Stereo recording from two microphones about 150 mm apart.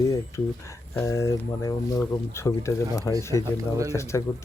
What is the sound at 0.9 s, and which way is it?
Speech, 20° left (ahead or behind).